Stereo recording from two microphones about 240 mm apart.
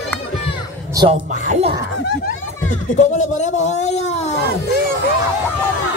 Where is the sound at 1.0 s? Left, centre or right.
Right.